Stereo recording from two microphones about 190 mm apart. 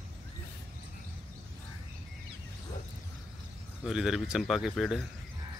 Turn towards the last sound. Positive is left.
turn(degrees=0)  # may be behind; listen again after turning